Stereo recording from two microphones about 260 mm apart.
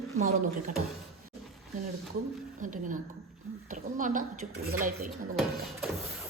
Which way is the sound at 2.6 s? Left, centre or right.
Right.